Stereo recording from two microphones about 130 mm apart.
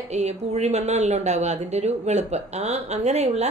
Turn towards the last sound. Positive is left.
turn(degrees=-60)  # may be behind; listen again after turning